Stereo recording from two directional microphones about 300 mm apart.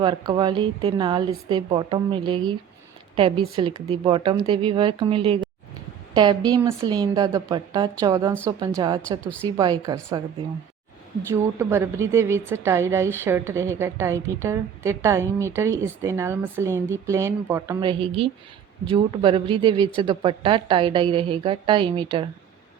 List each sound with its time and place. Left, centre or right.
0.0 s a woman's voice: centre
11.6 s a woman's voice: centre